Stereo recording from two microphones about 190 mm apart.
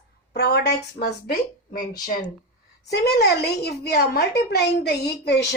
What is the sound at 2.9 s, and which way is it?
A woman's voice, 60° left (ahead or behind).